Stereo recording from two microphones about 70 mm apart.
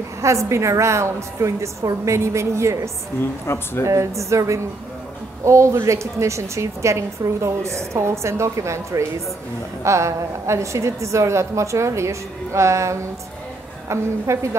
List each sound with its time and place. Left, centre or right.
0.2 s a woman's voice: right
3.4 s speech: left
3.8 s a woman's voice: right